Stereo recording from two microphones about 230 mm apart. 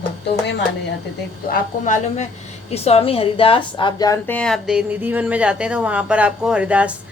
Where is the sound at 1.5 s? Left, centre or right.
Left.